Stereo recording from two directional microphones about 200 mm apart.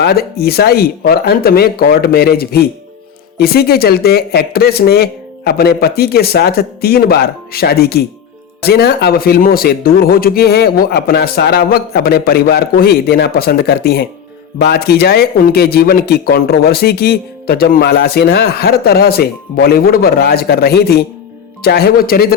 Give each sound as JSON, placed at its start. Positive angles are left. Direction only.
{"t": 0.0, "sound": "speech", "side_deg": 50}